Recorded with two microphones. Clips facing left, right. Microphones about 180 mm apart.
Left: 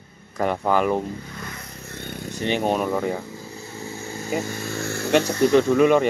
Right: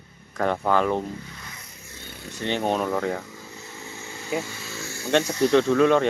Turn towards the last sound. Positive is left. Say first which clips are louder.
# left 2 dB
turn(degrees=10)  # may be behind; listen again after turning